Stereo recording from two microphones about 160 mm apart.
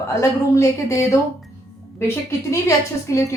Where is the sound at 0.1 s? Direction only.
20° left (ahead or behind).